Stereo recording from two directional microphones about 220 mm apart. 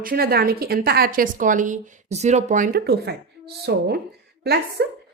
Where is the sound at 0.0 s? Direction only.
40° right (ahead or behind).